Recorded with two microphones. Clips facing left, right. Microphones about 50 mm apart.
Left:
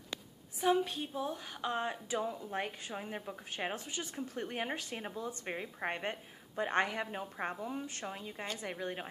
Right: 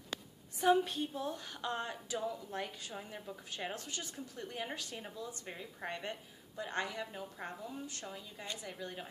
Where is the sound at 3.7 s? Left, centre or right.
Centre.